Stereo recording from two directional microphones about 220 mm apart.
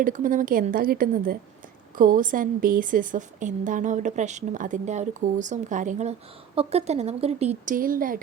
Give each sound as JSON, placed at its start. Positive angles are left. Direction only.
{"t": 0.0, "sound": "a woman's voice", "side_deg": -35}